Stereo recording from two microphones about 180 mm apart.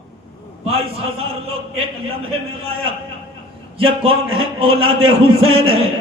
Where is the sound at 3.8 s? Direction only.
30° right (ahead or behind).